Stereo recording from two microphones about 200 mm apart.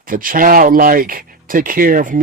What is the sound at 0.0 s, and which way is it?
Speech, 45° right (ahead or behind).